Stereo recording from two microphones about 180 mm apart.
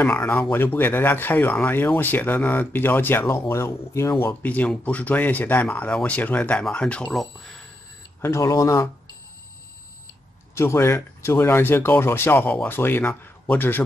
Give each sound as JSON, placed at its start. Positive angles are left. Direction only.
{"t": 0.0, "sound": "speech", "side_deg": 10}
{"t": 8.2, "sound": "speech", "side_deg": 15}
{"t": 10.5, "sound": "speech", "side_deg": 15}